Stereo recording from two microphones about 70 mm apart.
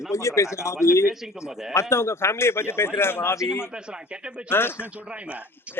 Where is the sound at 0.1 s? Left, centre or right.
Left.